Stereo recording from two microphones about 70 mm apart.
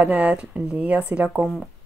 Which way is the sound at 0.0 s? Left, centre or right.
Right.